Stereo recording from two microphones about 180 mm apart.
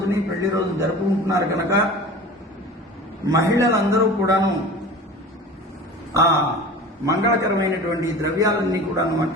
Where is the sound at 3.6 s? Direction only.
15° right (ahead or behind).